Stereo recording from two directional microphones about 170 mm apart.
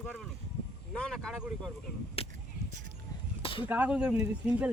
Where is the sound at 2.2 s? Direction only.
35° left (ahead or behind).